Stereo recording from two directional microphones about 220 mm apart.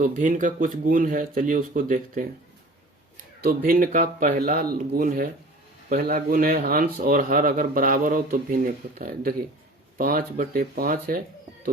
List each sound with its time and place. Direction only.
0.0 s a man's voice: 35° right (ahead or behind)
3.4 s a man's voice: 40° right (ahead or behind)